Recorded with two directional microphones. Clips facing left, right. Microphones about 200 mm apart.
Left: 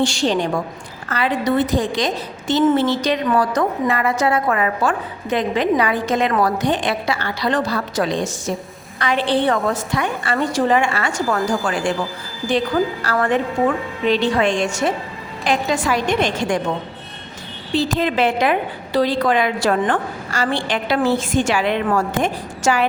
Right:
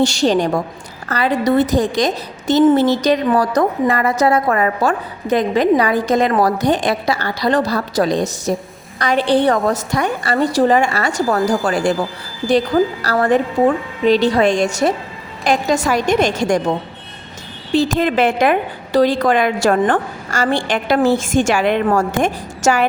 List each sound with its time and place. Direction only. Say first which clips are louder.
0.0 s a woman's voice: right 4 dB; 40° right (ahead or behind)
17.7 s a woman's voice: right 3 dB; 50° right (ahead or behind)